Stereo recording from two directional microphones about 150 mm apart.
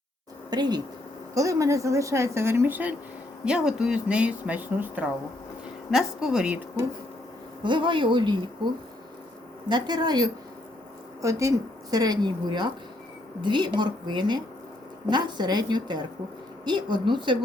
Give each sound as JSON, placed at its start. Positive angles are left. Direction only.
{"t": 0.5, "sound": "speech", "side_deg": -25}
{"t": 7.6, "sound": "a woman's voice", "side_deg": -30}